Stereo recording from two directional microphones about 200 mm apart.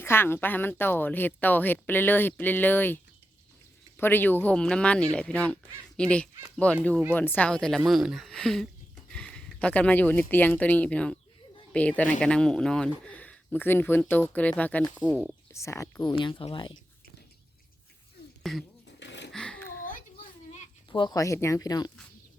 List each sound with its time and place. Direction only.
0.0 s speech: 10° left (ahead or behind)
15.1 s speech: 5° right (ahead or behind)
15.5 s speech: 15° left (ahead or behind)
18.5 s speech: centre (ahead or behind)
18.9 s a sound: 60° left (ahead or behind)
19.3 s a sound: 5° left (ahead or behind)
20.5 s speech: 25° left (ahead or behind)